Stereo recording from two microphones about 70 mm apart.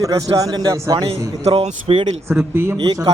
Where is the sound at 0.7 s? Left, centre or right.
Right.